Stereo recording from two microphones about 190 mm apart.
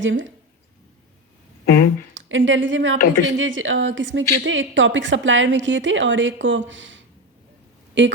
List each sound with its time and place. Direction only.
0.0 s speech: 80° right
1.6 s a sound: 55° left (ahead or behind)
2.1 s a woman's voice: 80° right